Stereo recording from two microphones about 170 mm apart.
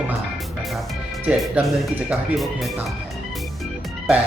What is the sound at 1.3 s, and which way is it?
Speech, 5° right (ahead or behind).